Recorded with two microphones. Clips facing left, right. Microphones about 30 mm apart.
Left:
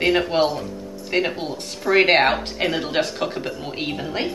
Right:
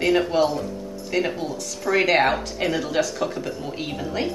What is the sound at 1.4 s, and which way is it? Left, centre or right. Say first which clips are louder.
Speech: even; left.